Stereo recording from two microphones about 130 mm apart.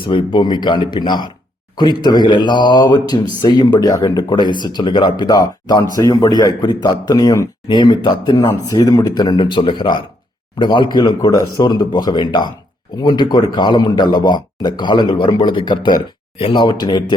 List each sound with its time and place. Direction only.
0.0 s speech: 40° left (ahead or behind)